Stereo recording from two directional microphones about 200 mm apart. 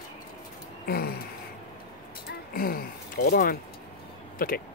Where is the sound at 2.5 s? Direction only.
45° left (ahead or behind).